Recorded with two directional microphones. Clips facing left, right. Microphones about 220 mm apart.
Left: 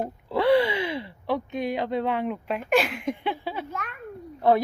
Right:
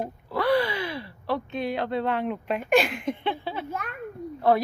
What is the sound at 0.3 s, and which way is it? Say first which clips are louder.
Gasp: left 3 dB; 25° left (ahead or behind).